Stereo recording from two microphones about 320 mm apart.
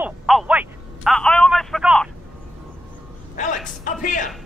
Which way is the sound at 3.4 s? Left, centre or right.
Left.